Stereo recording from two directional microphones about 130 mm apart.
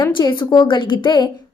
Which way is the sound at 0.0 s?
35° left (ahead or behind).